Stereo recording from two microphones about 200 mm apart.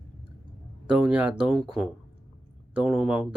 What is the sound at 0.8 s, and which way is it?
Speech, 5° right (ahead or behind).